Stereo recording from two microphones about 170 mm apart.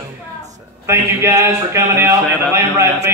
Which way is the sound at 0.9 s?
15° right (ahead or behind).